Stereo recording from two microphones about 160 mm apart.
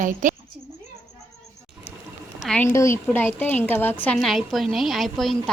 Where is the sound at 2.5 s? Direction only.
10° left (ahead or behind).